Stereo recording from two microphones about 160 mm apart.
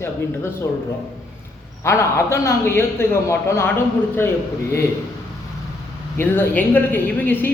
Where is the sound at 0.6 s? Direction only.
15° left (ahead or behind).